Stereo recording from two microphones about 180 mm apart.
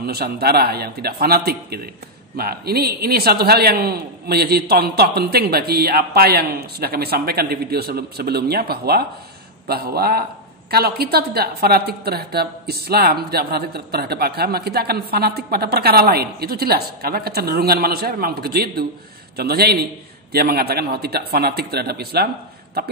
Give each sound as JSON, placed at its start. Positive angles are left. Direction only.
{"t": 0.0, "sound": "a woman's voice", "side_deg": -60}